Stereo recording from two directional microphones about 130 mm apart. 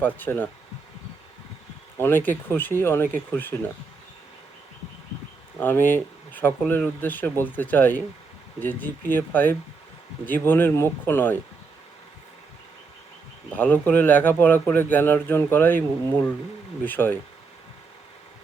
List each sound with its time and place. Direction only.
0.0 s speech: 15° left (ahead or behind)
2.0 s speech: 15° left (ahead or behind)
5.5 s speech: 15° left (ahead or behind)
13.6 s speech: 10° left (ahead or behind)
16.8 s speech: 15° left (ahead or behind)